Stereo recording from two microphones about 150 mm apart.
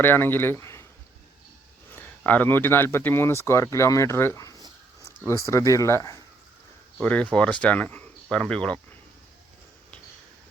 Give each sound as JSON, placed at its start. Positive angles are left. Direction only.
{"t": 0.0, "sound": "speech", "side_deg": 15}
{"t": 1.9, "sound": "speech", "side_deg": 10}
{"t": 7.0, "sound": "speech", "side_deg": 10}